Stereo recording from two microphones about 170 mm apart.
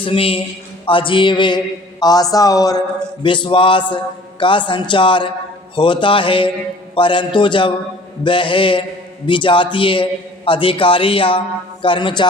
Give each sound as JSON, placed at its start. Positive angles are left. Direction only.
{"t": 0.0, "sound": "a man's voice", "side_deg": 30}